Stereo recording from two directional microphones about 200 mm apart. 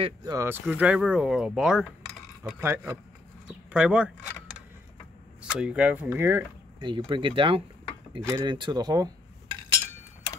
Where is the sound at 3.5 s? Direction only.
5° right (ahead or behind).